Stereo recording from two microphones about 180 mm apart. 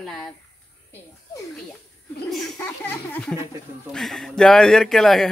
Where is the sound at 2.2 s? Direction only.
Centre (ahead or behind).